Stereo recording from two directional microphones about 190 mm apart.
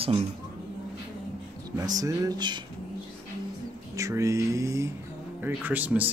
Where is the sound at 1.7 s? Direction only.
20° right (ahead or behind).